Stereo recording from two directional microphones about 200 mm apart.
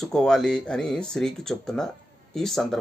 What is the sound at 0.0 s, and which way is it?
Speech, 5° left (ahead or behind).